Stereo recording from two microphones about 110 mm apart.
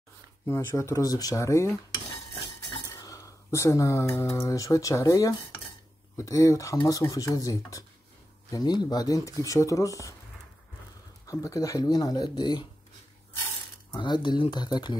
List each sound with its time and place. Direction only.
0.5 s speech: 25° left (ahead or behind)
2.8 s speech: 30° left (ahead or behind)
11.2 s speech: 30° left (ahead or behind)
13.9 s speech: 45° left (ahead or behind)